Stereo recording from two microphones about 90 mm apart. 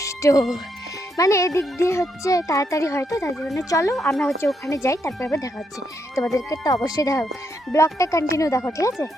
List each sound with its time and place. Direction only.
0.0 s music: 35° left (ahead or behind)
1.1 s a child's voice: 35° left (ahead or behind)
3.9 s speech: 5° left (ahead or behind)
4.6 s a child's voice: 35° left (ahead or behind)